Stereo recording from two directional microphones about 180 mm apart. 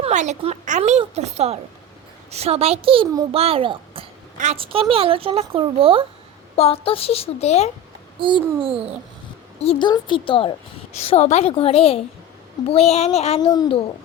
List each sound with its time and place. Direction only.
0.0 s a child's voice: 40° right (ahead or behind)
6.6 s a woman's voice: 35° left (ahead or behind)
8.2 s a child's voice: 30° right (ahead or behind)
9.8 s a woman's voice: 25° left (ahead or behind)